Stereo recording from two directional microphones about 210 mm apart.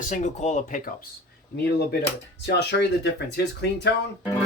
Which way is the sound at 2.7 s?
55° left (ahead or behind).